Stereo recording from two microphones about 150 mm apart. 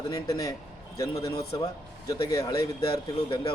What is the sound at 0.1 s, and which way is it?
Speech, 25° left (ahead or behind).